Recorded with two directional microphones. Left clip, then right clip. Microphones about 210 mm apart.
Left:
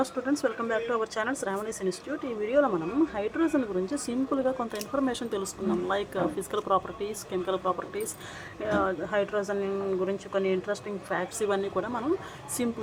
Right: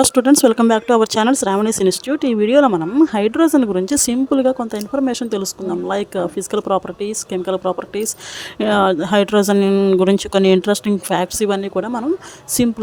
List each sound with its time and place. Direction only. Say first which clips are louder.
0.0 s speech: right 16 dB; 55° right (ahead or behind); by 8.1 s 40° right (ahead or behind)
8.5 s speech: right 13 dB; 55° right (ahead or behind); by 12.0 s 40° right (ahead or behind)